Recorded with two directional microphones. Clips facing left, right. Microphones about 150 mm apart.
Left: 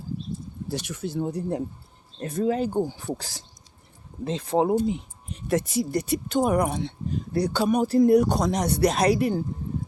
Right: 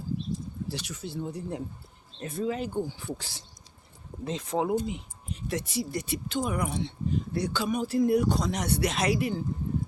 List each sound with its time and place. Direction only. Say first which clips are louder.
0.7 s speech: left 10 dB; 50° left (ahead or behind); by 4.7 s 35° left (ahead or behind)
4.9 s speech: left 7 dB; 45° left (ahead or behind)
7.3 s speech: left 9 dB; 35° left (ahead or behind)